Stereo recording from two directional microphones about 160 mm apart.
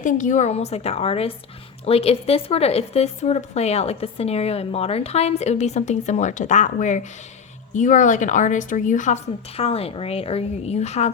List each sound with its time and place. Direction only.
0.0 s a woman's voice: 50° left (ahead or behind)